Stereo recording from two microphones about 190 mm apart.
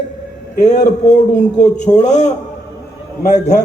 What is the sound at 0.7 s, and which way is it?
A man's voice, 40° left (ahead or behind).